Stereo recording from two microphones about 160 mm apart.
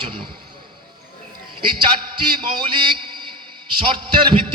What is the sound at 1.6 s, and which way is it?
A man's voice, 30° right (ahead or behind).